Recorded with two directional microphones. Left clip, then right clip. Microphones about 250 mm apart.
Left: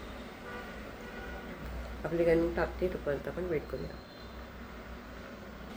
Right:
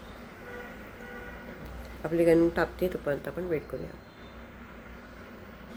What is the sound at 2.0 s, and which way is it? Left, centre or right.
Speech, right.